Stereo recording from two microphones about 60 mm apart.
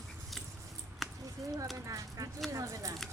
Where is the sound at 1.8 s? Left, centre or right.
Right.